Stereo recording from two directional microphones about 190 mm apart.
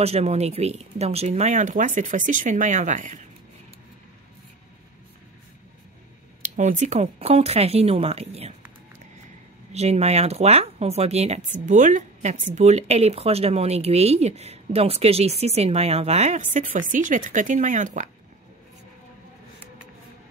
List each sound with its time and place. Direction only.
0.0 s speech: 35° right (ahead or behind)
6.4 s speech: 40° right (ahead or behind)
9.7 s speech: 35° right (ahead or behind)